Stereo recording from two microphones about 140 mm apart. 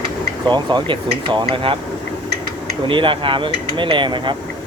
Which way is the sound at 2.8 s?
35° right (ahead or behind).